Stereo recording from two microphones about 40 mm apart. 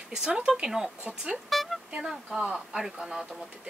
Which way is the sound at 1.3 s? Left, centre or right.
Centre.